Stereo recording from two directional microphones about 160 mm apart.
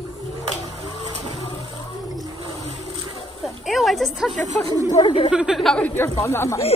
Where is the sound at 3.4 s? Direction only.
Centre (ahead or behind).